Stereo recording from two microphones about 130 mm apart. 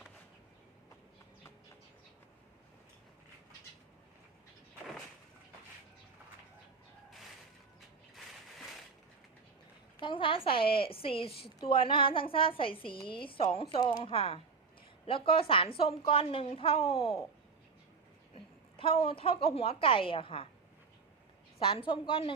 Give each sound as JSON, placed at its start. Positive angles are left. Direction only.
{"t": 8.1, "sound": "mechanisms", "side_deg": 0}
{"t": 10.0, "sound": "a woman's voice", "side_deg": 40}
{"t": 18.3, "sound": "a woman's voice", "side_deg": 45}
{"t": 21.6, "sound": "a woman's voice", "side_deg": 40}